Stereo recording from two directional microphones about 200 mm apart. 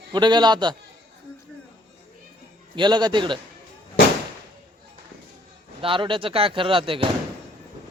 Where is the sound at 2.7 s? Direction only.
20° right (ahead or behind).